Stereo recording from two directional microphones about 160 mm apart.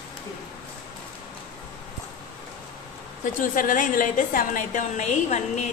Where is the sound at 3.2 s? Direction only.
55° left (ahead or behind).